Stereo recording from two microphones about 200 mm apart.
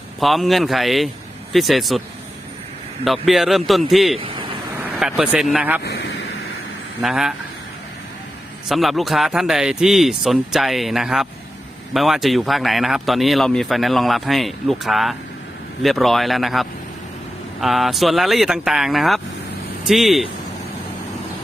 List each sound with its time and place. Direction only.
0.2 s speech: centre (ahead or behind)
3.0 s speech: centre (ahead or behind)
4.2 s a sound: 25° right (ahead or behind)
4.8 s speech: 5° right (ahead or behind)
5.8 s a sound: 60° left (ahead or behind)
7.0 s speech: centre (ahead or behind)
8.7 s speech: centre (ahead or behind)